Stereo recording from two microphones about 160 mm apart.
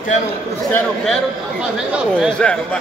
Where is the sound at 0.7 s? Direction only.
Centre (ahead or behind).